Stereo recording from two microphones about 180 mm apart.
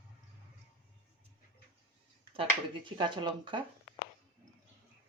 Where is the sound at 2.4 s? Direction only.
25° right (ahead or behind).